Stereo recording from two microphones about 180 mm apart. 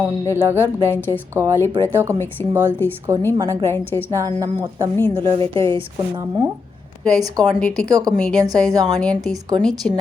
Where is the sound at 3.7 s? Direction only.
10° left (ahead or behind).